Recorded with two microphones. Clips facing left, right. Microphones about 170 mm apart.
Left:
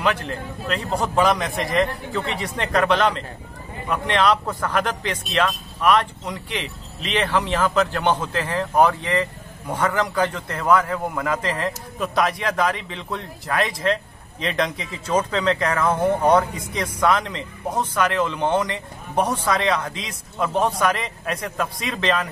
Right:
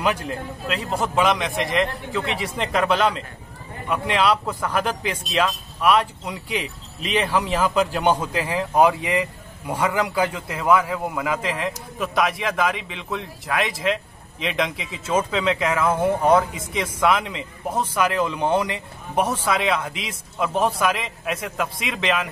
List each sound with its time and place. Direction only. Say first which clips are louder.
0.0 s speech: even; 10° right (ahead or behind)